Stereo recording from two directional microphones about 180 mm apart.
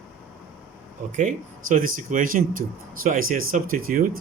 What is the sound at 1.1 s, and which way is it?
Speech, 45° right (ahead or behind).